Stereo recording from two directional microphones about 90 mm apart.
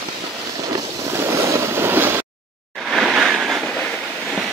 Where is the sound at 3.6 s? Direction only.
10° left (ahead or behind).